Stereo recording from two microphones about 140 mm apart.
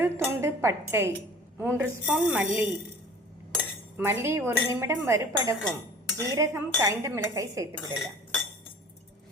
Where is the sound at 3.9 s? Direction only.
20° right (ahead or behind).